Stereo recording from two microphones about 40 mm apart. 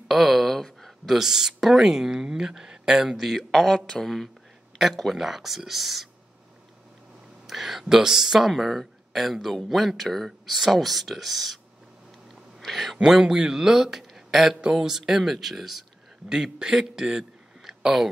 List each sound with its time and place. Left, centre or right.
0.1 s speech: centre
3.3 s speech: centre
7.4 s a sound: centre
7.8 s speech: centre
8.5 s speech: centre
13.0 s speech: centre
14.6 s speech: centre
16.3 s a man's voice: centre